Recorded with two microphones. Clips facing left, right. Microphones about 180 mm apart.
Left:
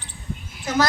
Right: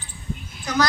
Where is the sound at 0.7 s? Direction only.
25° left (ahead or behind).